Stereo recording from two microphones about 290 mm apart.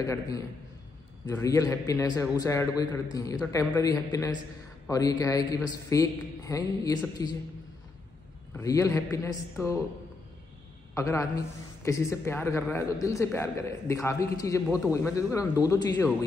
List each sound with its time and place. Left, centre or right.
0.0 s a man's voice: centre
8.5 s a man's voice: centre
11.0 s a man's voice: centre